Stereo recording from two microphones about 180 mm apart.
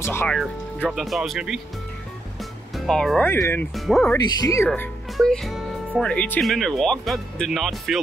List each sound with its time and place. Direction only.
0.0 s speech: 15° left (ahead or behind)
0.4 s speech: centre (ahead or behind)
2.7 s speech: centre (ahead or behind)
3.7 s speech: centre (ahead or behind)
4.4 s speech: 20° left (ahead or behind)
4.6 s speech: centre (ahead or behind)